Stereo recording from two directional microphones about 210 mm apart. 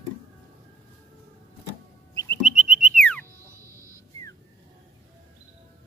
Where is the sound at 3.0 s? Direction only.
5° left (ahead or behind).